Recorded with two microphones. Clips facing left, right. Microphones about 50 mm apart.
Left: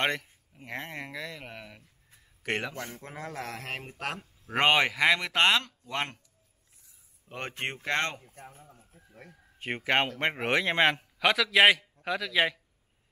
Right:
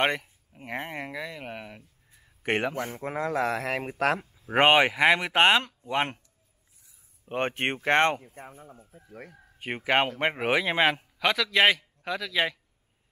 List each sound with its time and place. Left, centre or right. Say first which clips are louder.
0.0 s a man's voice: right 3 dB; centre; by 3.9 s right
4.5 s speech: right 4 dB; centre
7.2 s a man's voice: right 7 dB; right
8.4 s speech: right 4 dB; centre
8.6 s a man's voice: right 7 dB; right
9.6 s a man's voice: right 2 dB; centre